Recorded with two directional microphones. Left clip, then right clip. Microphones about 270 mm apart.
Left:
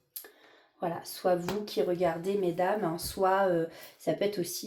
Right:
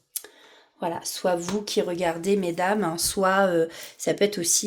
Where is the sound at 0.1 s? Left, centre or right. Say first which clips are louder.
Right 10 dB; right.